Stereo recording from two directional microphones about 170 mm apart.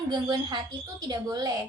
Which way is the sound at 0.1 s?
25° right (ahead or behind).